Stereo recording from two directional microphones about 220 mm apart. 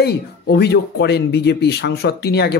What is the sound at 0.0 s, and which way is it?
A woman's voice, 50° left (ahead or behind).